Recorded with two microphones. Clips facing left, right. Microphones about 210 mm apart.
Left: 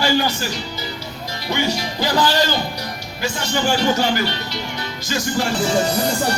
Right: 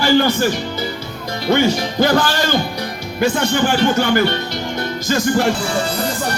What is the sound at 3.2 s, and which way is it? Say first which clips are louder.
Speech: right 6 dB; 55° right (ahead or behind).